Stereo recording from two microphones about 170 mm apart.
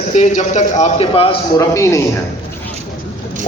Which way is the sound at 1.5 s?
20° left (ahead or behind).